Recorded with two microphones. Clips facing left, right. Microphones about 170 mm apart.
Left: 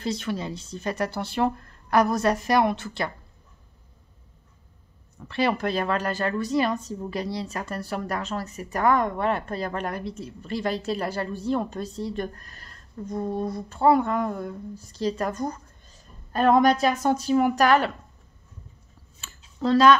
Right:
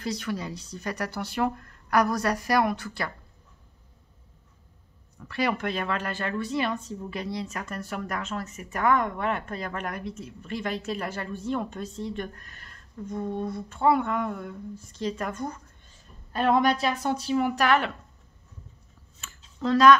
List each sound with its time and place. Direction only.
0.0 s speech: 25° left (ahead or behind)
5.2 s speech: 30° left (ahead or behind)
19.2 s a sound: 30° left (ahead or behind)